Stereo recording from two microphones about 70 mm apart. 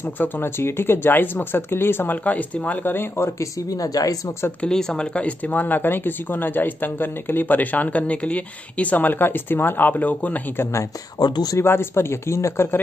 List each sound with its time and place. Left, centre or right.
0.2 s speech: left
3.3 s speech: left
4.6 s speech: centre
10.6 s speech: left
11.1 s speech: left
11.5 s speech: left